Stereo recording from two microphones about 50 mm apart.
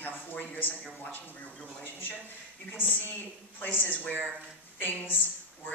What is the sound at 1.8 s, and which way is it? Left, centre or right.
Speech, left.